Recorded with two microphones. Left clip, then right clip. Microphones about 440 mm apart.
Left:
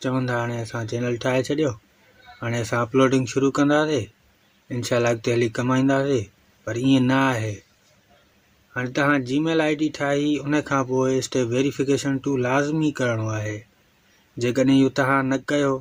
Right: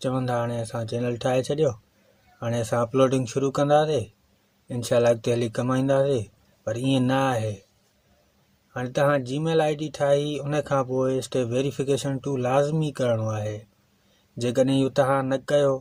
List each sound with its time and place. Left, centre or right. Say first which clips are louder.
0.0 s speech: left 1 dB; right
8.7 s speech: left 1 dB; right